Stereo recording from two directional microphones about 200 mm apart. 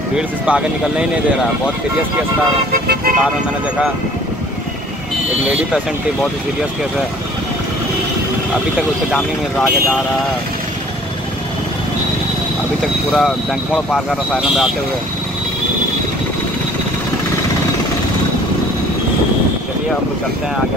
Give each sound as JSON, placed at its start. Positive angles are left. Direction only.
{"t": 0.1, "sound": "speech", "side_deg": -5}
{"t": 2.7, "sound": "speech", "side_deg": -45}
{"t": 9.1, "sound": "speech", "side_deg": 5}
{"t": 13.1, "sound": "speech", "side_deg": 0}